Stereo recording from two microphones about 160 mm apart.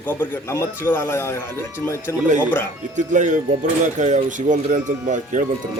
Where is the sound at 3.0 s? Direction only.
50° right (ahead or behind).